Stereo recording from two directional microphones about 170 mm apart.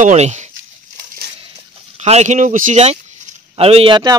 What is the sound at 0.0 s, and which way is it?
Speech, 40° right (ahead or behind).